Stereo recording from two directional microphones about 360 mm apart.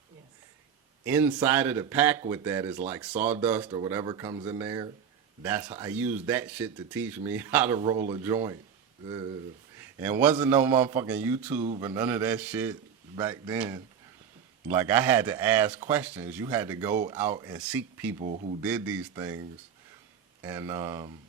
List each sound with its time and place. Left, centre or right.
1.0 s speech: centre
9.7 s speech: centre
18.2 s speech: right
18.6 s speech: centre